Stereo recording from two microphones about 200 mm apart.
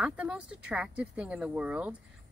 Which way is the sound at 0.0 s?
5° right (ahead or behind).